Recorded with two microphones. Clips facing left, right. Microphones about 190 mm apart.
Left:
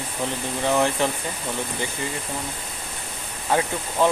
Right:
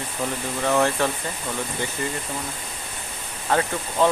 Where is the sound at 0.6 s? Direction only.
20° left (ahead or behind).